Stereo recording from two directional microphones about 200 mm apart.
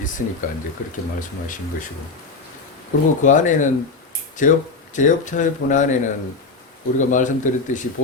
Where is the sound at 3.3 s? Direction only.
40° left (ahead or behind).